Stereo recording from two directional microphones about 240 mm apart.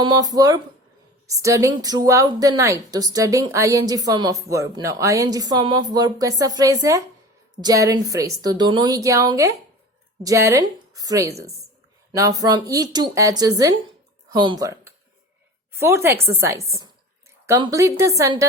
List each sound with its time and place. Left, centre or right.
0.0 s a woman's voice: centre